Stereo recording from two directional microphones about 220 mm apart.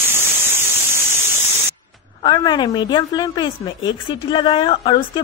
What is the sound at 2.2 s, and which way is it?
A woman's voice, 20° left (ahead or behind).